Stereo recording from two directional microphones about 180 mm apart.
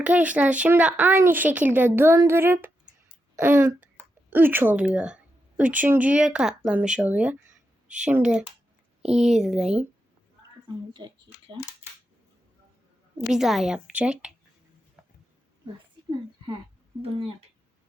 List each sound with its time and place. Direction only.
0.0 s a woman's voice: 10° right (ahead or behind)
10.9 s speech: 25° right (ahead or behind)
13.3 s a woman's voice: centre (ahead or behind)
15.0 s a sound: 5° right (ahead or behind)